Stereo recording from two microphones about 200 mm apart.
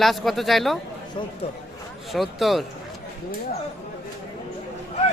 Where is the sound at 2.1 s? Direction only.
Centre (ahead or behind).